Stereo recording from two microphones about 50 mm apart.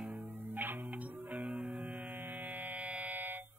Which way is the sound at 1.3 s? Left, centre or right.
Right.